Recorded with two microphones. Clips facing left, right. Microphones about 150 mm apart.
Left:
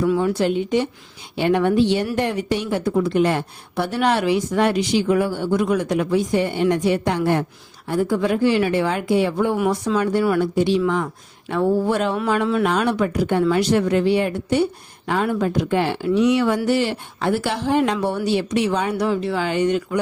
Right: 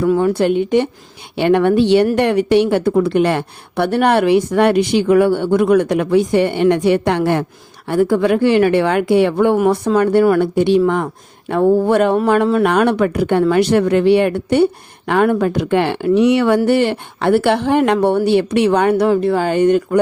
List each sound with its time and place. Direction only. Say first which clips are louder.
0.0 s a woman's voice: right 5 dB; 50° right (ahead or behind)
9.6 s a woman's voice: right 6 dB; 55° right (ahead or behind)
12.3 s speech: right 6 dB; 45° right (ahead or behind)
12.6 s a woman's voice: right 6 dB; 60° right (ahead or behind)